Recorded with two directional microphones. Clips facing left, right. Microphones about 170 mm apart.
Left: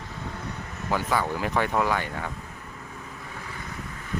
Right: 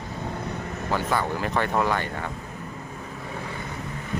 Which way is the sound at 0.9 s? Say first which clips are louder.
Even; 10° left (ahead or behind).